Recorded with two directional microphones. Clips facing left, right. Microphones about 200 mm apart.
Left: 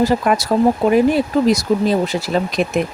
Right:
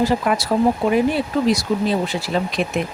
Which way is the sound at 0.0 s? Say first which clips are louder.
Left 3 dB; 45° left (ahead or behind).